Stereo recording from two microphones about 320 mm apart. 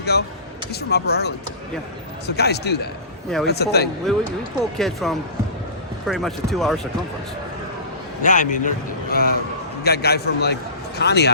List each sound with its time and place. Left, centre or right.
0.1 s a man's voice: left
4.1 s speech: centre
8.2 s a man's voice: left